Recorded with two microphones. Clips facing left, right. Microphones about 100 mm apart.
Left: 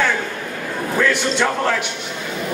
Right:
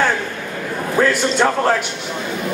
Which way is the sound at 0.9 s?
35° right (ahead or behind).